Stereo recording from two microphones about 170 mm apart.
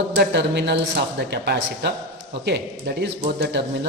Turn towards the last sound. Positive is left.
turn(degrees=-75)  # may be behind; listen again after turning